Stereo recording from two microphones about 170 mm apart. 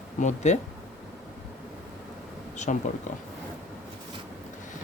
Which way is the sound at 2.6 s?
45° left (ahead or behind).